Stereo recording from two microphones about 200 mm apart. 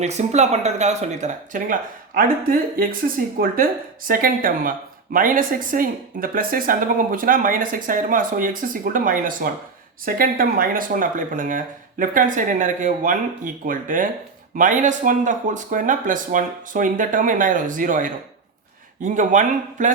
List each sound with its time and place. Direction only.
0.0 s speech: 35° right (ahead or behind)